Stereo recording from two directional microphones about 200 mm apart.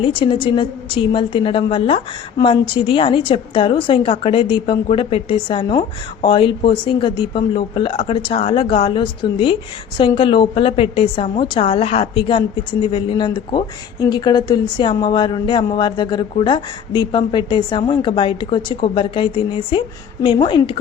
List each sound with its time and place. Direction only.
0.0 s a woman's voice: 25° left (ahead or behind)